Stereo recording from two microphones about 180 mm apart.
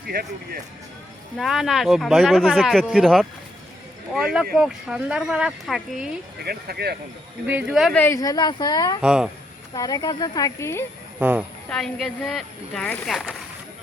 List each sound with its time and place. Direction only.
0.1 s speech: 55° right (ahead or behind)
1.4 s speech: centre (ahead or behind)
6.4 s speech: 60° right (ahead or behind)
7.4 s speech: 5° right (ahead or behind)
7.9 s speech: 15° left (ahead or behind)
9.0 s speech: 5° right (ahead or behind)
9.7 s speech: 20° left (ahead or behind)
11.2 s speech: 10° right (ahead or behind)
11.7 s speech: centre (ahead or behind)